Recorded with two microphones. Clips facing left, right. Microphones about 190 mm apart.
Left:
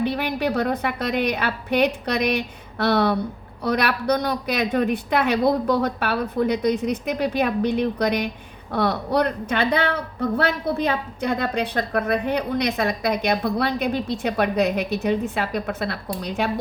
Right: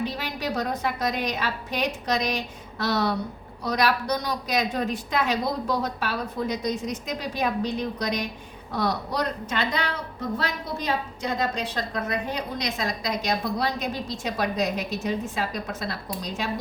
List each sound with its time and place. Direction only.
0.0 s a woman's voice: 60° left (ahead or behind)